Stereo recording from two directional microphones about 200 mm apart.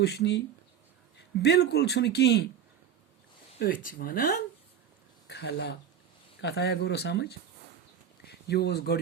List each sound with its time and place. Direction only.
0.0 s speech: 55° left (ahead or behind)
3.6 s speech: 45° left (ahead or behind)
5.3 s speech: 60° left (ahead or behind)